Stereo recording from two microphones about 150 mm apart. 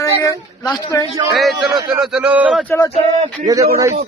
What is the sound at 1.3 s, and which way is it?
A man's voice, centre (ahead or behind).